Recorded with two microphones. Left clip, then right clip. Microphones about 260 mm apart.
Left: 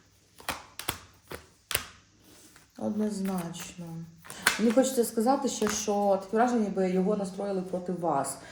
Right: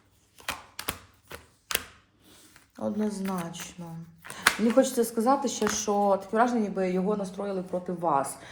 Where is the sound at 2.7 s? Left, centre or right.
Centre.